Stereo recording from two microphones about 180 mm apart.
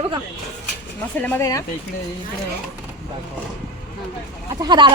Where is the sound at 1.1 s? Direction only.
10° left (ahead or behind).